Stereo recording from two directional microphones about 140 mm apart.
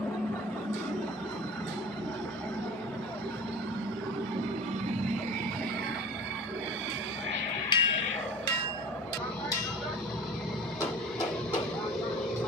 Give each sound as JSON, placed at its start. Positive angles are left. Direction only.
{"t": 7.7, "sound": "music", "side_deg": 35}